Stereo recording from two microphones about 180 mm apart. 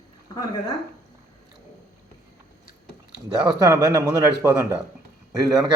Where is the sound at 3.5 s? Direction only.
20° right (ahead or behind).